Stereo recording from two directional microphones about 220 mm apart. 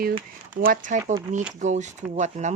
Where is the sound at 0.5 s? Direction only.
40° right (ahead or behind).